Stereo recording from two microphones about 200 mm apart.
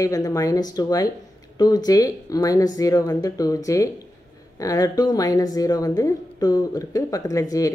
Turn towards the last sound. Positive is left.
turn(degrees=15)  # may be behind; listen again after turning